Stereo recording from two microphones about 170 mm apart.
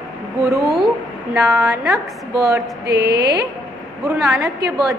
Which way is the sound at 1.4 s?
20° right (ahead or behind).